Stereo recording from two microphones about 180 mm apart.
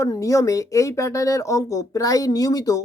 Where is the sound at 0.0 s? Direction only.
20° left (ahead or behind).